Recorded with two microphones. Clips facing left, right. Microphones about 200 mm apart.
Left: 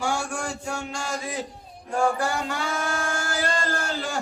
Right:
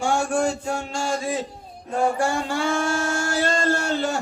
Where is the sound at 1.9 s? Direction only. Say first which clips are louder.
Right 2 dB; 25° right (ahead or behind).